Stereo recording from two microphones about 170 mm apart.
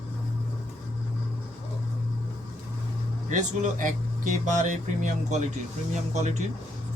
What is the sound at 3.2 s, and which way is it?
Speech, 45° right (ahead or behind).